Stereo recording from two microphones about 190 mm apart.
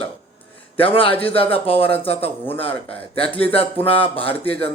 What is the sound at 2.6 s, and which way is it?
Speech, 30° left (ahead or behind).